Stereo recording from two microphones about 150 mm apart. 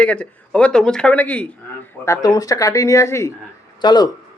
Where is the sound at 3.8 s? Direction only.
30° left (ahead or behind).